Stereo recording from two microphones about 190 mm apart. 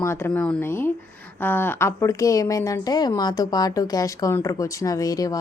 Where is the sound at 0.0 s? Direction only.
15° left (ahead or behind).